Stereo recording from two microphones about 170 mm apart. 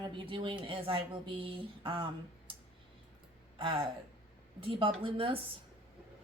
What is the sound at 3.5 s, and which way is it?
Speech, 30° right (ahead or behind).